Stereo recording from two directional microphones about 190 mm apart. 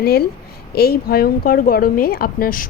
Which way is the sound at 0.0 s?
55° left (ahead or behind).